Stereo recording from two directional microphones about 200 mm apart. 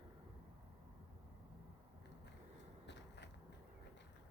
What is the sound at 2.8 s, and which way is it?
Biting, 60° left (ahead or behind).